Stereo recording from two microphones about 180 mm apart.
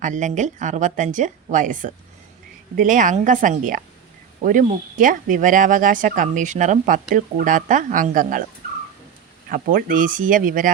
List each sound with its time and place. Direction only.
0.0 s speech: 45° right (ahead or behind)
9.5 s speech: 50° right (ahead or behind)